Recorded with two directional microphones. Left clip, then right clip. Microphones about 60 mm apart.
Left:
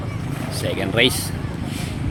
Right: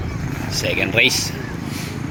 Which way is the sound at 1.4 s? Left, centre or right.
Left.